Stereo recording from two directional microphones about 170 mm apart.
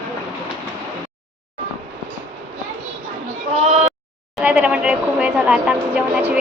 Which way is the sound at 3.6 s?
40° right (ahead or behind).